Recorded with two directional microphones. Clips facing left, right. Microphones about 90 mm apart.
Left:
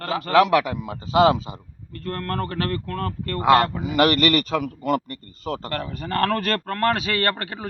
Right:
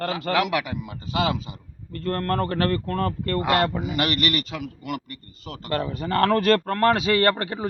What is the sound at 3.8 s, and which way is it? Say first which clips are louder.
A man's voice: left 6 dB; 35° left (ahead or behind).